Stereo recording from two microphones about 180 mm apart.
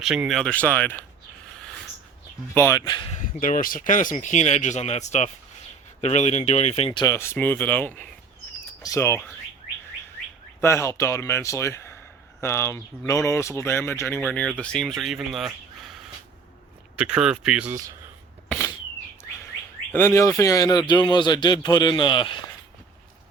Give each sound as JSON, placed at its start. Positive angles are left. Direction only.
{"t": 0.0, "sound": "speech", "side_deg": -5}
{"t": 2.6, "sound": "a man's voice", "side_deg": 20}
{"t": 3.2, "sound": "speech", "side_deg": 45}
{"t": 7.0, "sound": "speech", "side_deg": 15}
{"t": 10.6, "sound": "speech", "side_deg": 15}
{"t": 17.0, "sound": "speech", "side_deg": -5}
{"t": 19.9, "sound": "a man's voice", "side_deg": 15}